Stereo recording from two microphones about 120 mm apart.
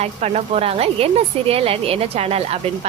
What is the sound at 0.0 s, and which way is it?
Speech, 60° right (ahead or behind).